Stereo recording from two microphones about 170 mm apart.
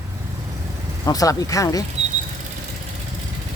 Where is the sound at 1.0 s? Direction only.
20° left (ahead or behind).